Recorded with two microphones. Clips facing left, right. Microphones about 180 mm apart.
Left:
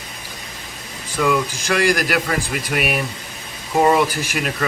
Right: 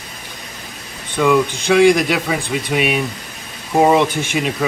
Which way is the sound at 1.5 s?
Centre (ahead or behind).